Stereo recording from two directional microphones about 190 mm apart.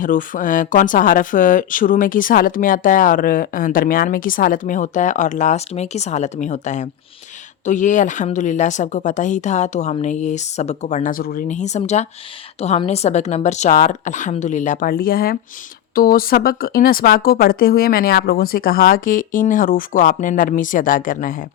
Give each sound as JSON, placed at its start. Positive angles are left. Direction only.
{"t": 0.0, "sound": "speech", "side_deg": 45}